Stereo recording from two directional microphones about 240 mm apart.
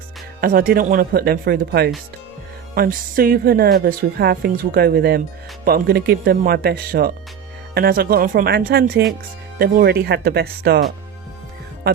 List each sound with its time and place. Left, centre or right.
0.4 s a woman's voice: right